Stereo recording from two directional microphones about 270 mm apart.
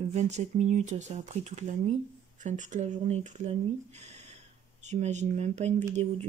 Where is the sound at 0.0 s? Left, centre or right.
Right.